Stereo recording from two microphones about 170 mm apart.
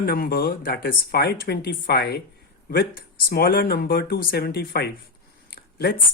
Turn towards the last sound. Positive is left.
turn(degrees=60)  # may be behind; listen again after turning